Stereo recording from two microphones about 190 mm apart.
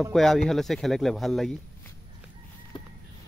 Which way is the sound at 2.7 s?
25° left (ahead or behind).